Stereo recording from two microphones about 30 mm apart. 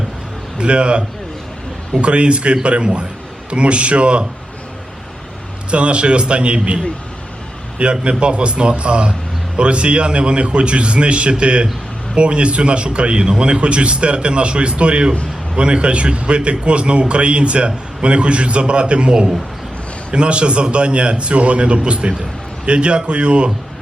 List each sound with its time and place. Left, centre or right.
0.6 s a man's voice: right
5.7 s a man's voice: right